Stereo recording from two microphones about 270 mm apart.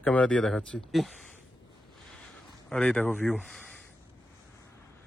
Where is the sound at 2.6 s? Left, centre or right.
Centre.